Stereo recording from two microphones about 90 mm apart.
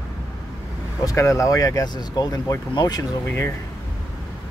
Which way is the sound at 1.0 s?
35° left (ahead or behind).